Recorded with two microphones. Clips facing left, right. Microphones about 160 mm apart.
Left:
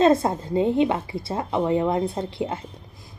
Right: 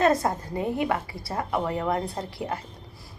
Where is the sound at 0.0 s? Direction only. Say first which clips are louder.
Left 4 dB; 25° left (ahead or behind).